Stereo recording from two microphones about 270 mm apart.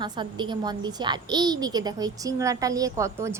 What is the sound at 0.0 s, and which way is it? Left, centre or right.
A woman's voice, centre.